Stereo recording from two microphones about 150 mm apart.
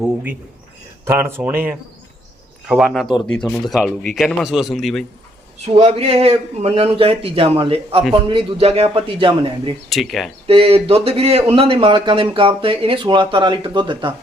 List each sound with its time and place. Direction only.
0.0 s speech: 10° right (ahead or behind)
5.6 s speech: 45° right (ahead or behind)
9.9 s speech: centre (ahead or behind)
10.4 s speech: 40° right (ahead or behind)